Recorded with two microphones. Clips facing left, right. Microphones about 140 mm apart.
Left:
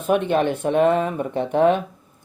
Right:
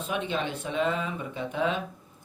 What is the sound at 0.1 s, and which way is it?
Speech, 55° left (ahead or behind).